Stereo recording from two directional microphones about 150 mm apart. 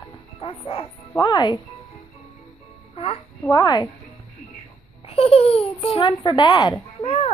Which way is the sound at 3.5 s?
25° left (ahead or behind).